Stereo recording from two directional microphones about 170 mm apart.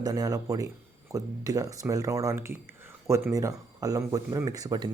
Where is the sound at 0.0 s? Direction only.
20° right (ahead or behind).